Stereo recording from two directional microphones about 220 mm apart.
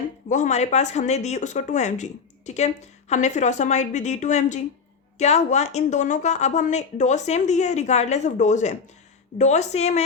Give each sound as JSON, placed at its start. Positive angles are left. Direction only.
{"t": 0.3, "sound": "speech", "side_deg": 35}